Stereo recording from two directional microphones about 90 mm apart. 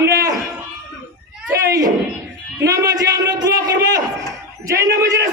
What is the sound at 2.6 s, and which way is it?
A man's voice, 45° right (ahead or behind).